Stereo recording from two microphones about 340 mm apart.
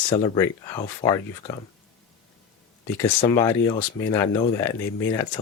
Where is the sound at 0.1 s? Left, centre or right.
Centre.